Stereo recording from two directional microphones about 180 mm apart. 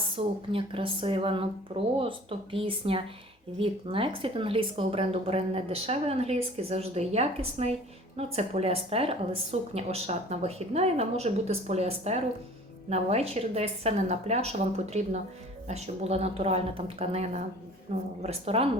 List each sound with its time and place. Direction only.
0.2 s speech: 30° right (ahead or behind)